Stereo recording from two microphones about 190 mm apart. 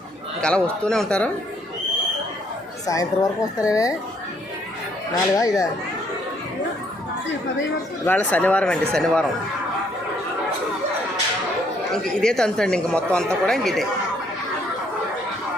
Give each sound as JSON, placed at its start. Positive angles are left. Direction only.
{"t": 0.4, "sound": "speech", "side_deg": 5}
{"t": 2.8, "sound": "speech", "side_deg": 20}
{"t": 5.4, "sound": "speech", "side_deg": 20}
{"t": 8.0, "sound": "speech", "side_deg": 10}
{"t": 12.2, "sound": "speech", "side_deg": 5}